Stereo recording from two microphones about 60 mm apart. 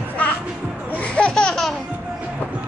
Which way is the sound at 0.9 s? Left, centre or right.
Left.